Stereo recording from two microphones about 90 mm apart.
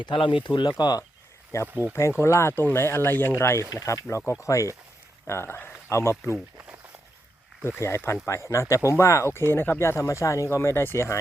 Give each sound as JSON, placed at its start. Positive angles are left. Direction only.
{"t": 0.0, "sound": "speech", "side_deg": 65}
{"t": 1.6, "sound": "speech", "side_deg": -20}
{"t": 1.9, "sound": "speech", "side_deg": 30}
{"t": 7.8, "sound": "speech", "side_deg": 30}